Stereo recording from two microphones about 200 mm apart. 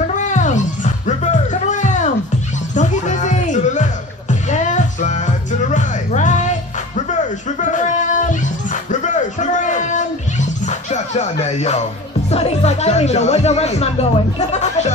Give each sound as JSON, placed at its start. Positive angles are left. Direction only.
{"t": 0.0, "sound": "music", "side_deg": 40}
{"t": 7.6, "sound": "a sound", "side_deg": 40}
{"t": 10.6, "sound": "music", "side_deg": 35}
{"t": 12.3, "sound": "speech", "side_deg": 30}